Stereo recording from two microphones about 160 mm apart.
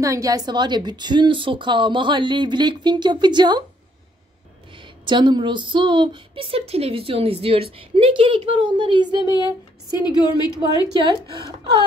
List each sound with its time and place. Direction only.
0.0 s speech: 20° right (ahead or behind)
4.7 s speech: 30° right (ahead or behind)
9.9 s a woman's voice: 25° left (ahead or behind)
11.0 s speech: 30° right (ahead or behind)